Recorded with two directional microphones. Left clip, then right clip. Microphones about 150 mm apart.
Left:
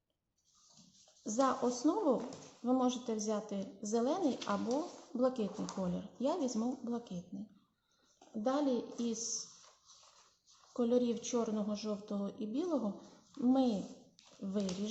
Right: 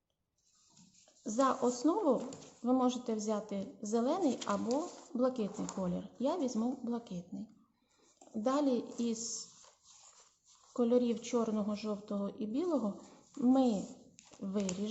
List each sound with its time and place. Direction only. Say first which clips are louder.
1.2 s speech: right 2 dB; 10° right (ahead or behind)
8.4 s speech: right 2 dB; 25° right (ahead or behind)
10.8 s speech: right 2 dB; 20° right (ahead or behind)